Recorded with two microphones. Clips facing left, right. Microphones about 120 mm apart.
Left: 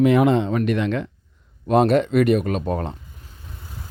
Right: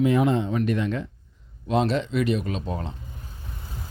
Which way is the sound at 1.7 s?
55° left (ahead or behind).